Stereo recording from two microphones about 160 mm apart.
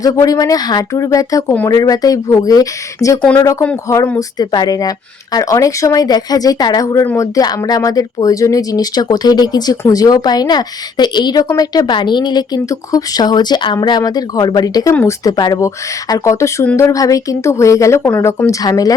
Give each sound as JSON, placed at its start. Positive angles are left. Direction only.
{"t": 0.0, "sound": "a woman's voice", "side_deg": 20}